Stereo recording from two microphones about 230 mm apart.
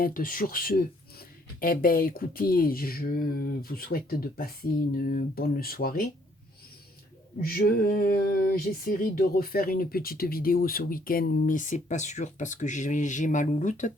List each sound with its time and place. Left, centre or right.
0.0 s speech: left
7.4 s speech: left